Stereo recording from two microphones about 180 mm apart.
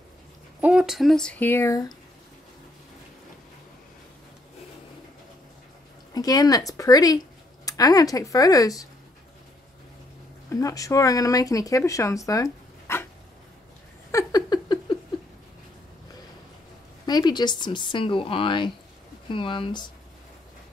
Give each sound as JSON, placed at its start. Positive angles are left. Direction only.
{"t": 0.6, "sound": "speech", "side_deg": -5}
{"t": 6.1, "sound": "speech", "side_deg": 20}
{"t": 10.5, "sound": "speech", "side_deg": 20}
{"t": 12.9, "sound": "dog", "side_deg": 15}
{"t": 14.1, "sound": "a sound", "side_deg": 20}
{"t": 17.0, "sound": "speech", "side_deg": 25}